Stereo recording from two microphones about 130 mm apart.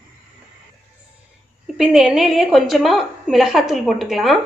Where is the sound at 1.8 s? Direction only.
5° right (ahead or behind).